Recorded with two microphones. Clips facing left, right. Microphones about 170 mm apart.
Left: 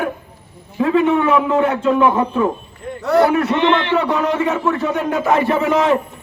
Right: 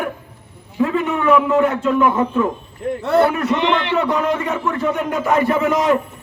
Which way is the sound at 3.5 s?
Centre (ahead or behind).